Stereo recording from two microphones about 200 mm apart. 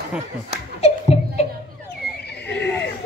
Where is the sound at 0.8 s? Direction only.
30° left (ahead or behind).